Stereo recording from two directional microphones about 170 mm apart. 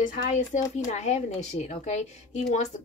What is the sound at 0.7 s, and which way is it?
A woman's voice, 45° left (ahead or behind).